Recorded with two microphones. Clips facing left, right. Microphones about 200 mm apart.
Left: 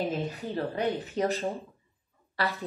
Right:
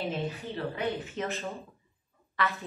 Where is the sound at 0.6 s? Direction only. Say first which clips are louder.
Left 3 dB; 40° left (ahead or behind).